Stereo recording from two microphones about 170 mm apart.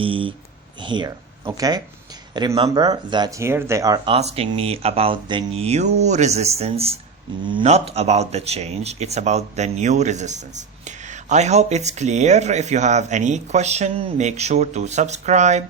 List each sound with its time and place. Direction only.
0.0 s speech: 30° right (ahead or behind)
4.1 s speech: 35° right (ahead or behind)